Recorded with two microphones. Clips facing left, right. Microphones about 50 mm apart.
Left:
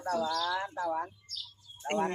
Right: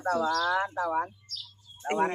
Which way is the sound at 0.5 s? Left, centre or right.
Right.